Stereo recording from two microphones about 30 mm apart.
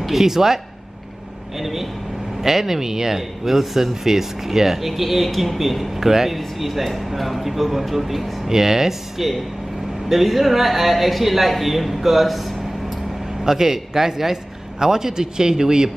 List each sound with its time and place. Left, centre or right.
0.0 s speech: centre
1.6 s vehicle: centre
2.4 s a man's voice: centre
13.4 s a man's voice: centre